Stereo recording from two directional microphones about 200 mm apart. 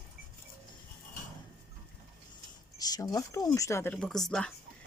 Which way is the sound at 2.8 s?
20° left (ahead or behind).